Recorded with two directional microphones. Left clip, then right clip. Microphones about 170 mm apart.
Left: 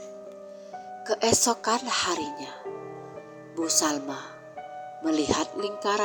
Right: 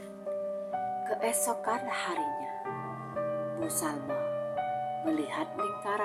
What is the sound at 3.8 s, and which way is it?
Speech, 35° left (ahead or behind).